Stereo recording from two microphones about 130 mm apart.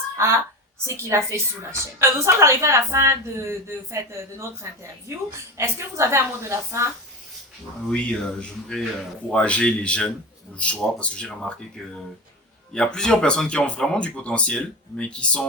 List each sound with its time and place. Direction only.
0.2 s a woman's voice: 20° right (ahead or behind)
7.9 s speech: 10° left (ahead or behind)
12.7 s speech: 5° left (ahead or behind)